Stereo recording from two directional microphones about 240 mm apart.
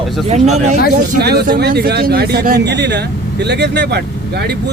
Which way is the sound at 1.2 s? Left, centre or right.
Right.